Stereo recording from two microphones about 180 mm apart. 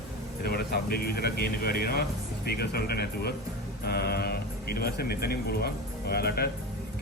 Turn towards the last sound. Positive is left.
turn(degrees=60)  # may be behind; listen again after turning